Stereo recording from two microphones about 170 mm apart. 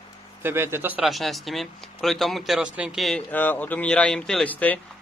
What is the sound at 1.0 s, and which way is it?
Speech, centre (ahead or behind).